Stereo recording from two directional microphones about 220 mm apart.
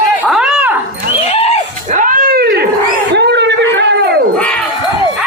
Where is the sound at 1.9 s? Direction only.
35° right (ahead or behind).